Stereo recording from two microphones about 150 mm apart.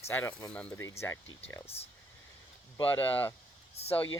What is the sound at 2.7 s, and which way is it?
Speech, 35° left (ahead or behind).